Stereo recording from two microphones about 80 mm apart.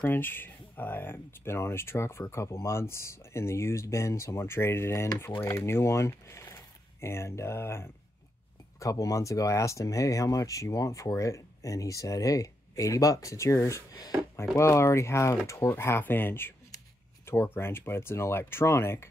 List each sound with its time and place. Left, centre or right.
0.0 s speech: left